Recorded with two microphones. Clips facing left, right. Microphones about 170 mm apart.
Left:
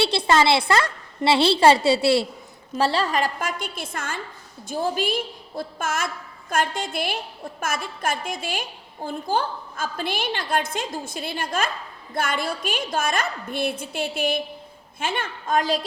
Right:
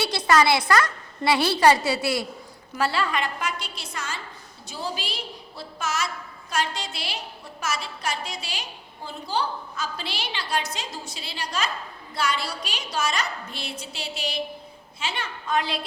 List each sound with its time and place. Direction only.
0.0 s a woman's voice: 25° left (ahead or behind)